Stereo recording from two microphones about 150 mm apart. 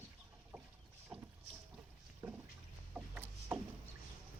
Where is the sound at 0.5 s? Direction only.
20° right (ahead or behind).